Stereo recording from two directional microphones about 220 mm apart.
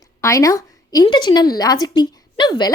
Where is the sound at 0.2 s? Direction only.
15° left (ahead or behind).